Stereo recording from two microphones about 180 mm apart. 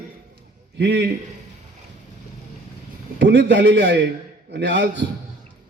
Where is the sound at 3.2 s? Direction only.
75° right (ahead or behind).